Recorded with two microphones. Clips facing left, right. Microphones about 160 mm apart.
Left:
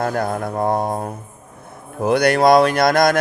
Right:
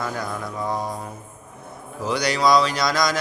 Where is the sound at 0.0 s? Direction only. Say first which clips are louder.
Left 7 dB; 55° left (ahead or behind).